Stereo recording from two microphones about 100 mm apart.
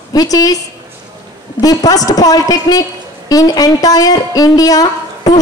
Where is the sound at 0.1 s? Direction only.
40° left (ahead or behind).